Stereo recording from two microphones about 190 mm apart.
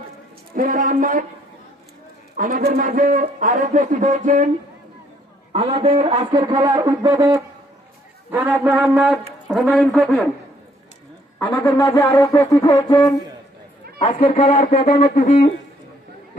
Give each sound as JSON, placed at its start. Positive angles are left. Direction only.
{"t": 0.5, "sound": "a man's voice", "side_deg": -45}
{"t": 2.3, "sound": "a man's voice", "side_deg": -45}
{"t": 5.5, "sound": "a man's voice", "side_deg": -30}
{"t": 11.3, "sound": "music", "side_deg": 15}
{"t": 14.0, "sound": "speech", "side_deg": 30}
{"t": 15.2, "sound": "music", "side_deg": 50}